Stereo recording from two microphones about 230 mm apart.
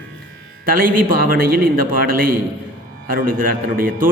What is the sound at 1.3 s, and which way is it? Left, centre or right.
A man's voice, right.